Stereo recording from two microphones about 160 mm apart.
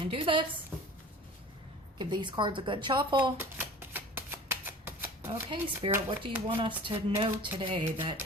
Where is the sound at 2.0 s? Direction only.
30° right (ahead or behind).